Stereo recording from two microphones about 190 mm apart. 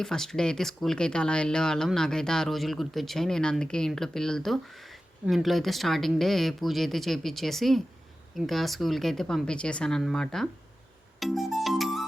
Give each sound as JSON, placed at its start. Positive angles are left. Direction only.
{"t": 0.0, "sound": "speech", "side_deg": 5}
{"t": 11.2, "sound": "music", "side_deg": 0}